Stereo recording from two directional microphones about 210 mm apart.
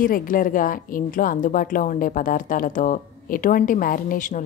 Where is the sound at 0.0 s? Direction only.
40° left (ahead or behind).